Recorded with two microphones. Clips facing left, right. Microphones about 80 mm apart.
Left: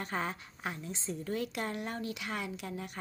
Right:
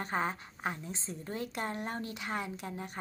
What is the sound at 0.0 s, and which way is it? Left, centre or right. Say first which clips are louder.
A woman's voice: right 2 dB; right.